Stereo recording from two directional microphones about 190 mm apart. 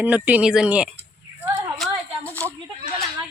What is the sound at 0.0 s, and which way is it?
Speech, 10° right (ahead or behind).